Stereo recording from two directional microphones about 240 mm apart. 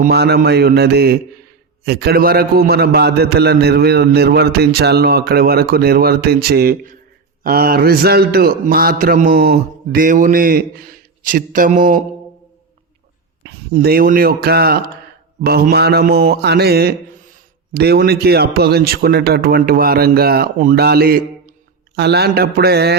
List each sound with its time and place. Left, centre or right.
0.0 s a man's voice: right
13.4 s a man's voice: right